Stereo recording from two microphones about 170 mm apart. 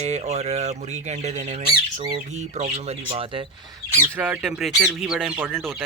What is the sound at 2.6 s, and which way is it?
Speech, 40° right (ahead or behind).